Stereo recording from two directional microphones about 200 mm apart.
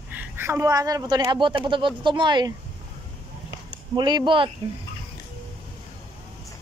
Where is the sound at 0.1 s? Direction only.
10° right (ahead or behind).